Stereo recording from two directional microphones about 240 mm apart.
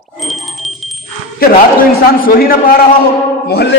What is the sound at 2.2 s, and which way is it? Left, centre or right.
A man's voice, left.